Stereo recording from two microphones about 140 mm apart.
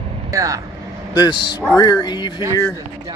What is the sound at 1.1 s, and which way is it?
Speech, 30° left (ahead or behind).